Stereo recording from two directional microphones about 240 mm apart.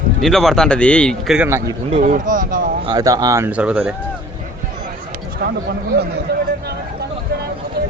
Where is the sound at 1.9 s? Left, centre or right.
Right.